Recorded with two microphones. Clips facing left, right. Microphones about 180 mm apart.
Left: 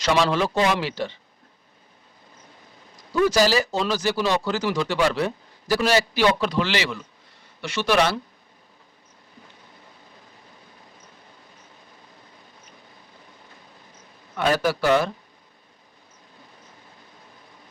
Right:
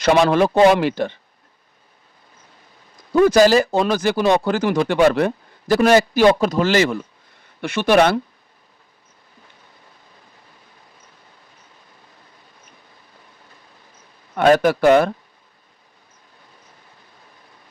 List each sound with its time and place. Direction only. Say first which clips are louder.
0.0 s speech: right 6 dB; 55° right (ahead or behind)
3.1 s speech: right 7 dB; 55° right (ahead or behind)
14.3 s speech: right 8 dB; 55° right (ahead or behind)